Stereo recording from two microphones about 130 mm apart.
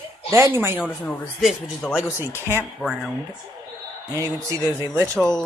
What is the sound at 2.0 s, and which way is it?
Speech, 20° left (ahead or behind).